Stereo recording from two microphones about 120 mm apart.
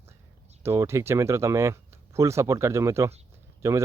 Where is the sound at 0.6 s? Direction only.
20° right (ahead or behind).